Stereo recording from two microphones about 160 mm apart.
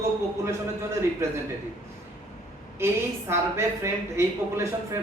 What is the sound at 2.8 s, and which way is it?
A woman's voice, 15° right (ahead or behind).